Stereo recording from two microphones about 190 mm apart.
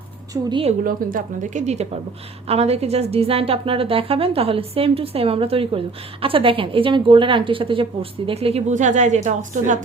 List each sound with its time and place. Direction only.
0.5 s a woman's voice: 30° right (ahead or behind)
0.9 s a woman's voice: 45° right (ahead or behind)